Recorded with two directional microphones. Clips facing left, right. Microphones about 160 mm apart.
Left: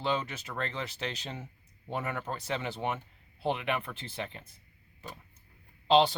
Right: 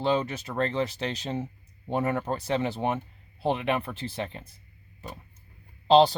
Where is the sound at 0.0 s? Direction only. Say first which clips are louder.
Right 6 dB; 40° right (ahead or behind).